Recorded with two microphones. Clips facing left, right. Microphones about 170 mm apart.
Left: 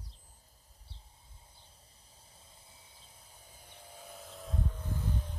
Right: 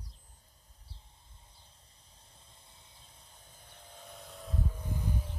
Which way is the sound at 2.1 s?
5° left (ahead or behind).